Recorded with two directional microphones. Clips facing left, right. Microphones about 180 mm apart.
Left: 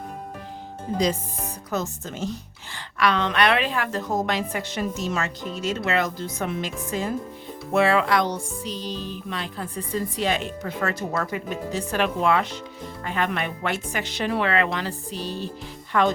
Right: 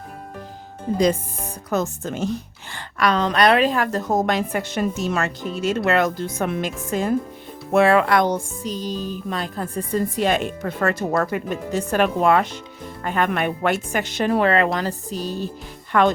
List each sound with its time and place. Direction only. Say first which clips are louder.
0.9 s speech: right 5 dB; 45° right (ahead or behind)
2.7 s speech: right 2 dB; 45° right (ahead or behind)
15.9 s speech: right 4 dB; 60° right (ahead or behind)